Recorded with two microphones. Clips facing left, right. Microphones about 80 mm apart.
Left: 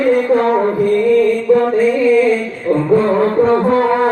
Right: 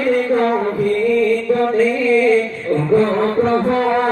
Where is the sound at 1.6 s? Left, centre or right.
Centre.